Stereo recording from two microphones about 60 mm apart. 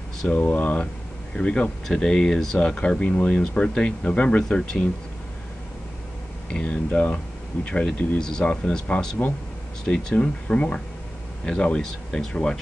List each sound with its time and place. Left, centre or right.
0.3 s speech: left
6.5 s speech: centre
8.2 s speech: centre